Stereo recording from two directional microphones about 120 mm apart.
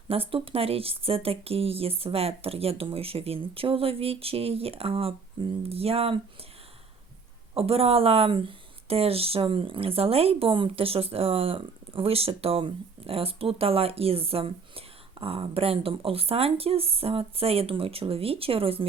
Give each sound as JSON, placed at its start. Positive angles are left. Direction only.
{"t": 0.1, "sound": "speech", "side_deg": -50}
{"t": 7.5, "sound": "speech", "side_deg": -55}